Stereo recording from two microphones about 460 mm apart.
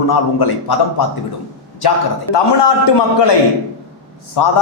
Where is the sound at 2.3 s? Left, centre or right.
Left.